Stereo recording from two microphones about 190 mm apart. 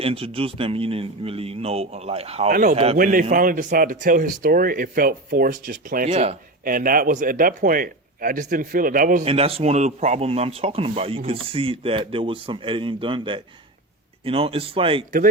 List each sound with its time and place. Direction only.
0.0 s speech: 30° right (ahead or behind)
2.5 s speech: 45° right (ahead or behind)
2.7 s speech: 30° right (ahead or behind)
3.0 s speech: 45° right (ahead or behind)
9.2 s speech: 30° right (ahead or behind)